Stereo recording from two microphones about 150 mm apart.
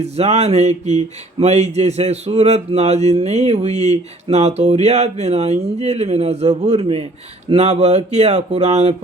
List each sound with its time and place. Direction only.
0.0 s speech: 45° right (ahead or behind)